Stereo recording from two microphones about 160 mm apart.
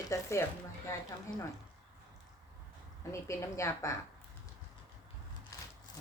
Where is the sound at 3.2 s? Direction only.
15° left (ahead or behind).